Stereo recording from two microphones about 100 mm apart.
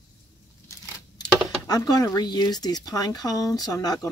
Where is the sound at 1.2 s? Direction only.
40° left (ahead or behind).